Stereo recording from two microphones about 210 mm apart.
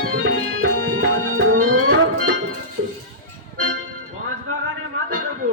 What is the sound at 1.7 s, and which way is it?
Music, 90° right.